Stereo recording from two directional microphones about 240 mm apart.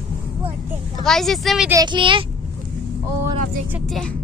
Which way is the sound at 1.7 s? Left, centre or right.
Centre.